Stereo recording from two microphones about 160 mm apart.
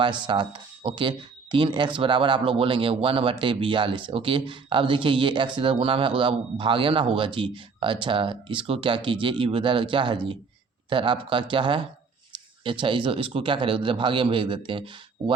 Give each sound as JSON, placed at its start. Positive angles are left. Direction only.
{"t": 0.0, "sound": "speech", "side_deg": -30}